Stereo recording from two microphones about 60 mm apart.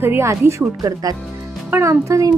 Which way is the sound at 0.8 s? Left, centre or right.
Right.